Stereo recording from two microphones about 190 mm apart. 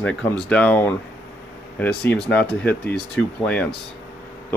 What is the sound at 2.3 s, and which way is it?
Speech, 5° left (ahead or behind).